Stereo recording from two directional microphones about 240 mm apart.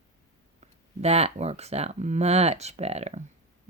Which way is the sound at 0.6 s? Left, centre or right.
Right.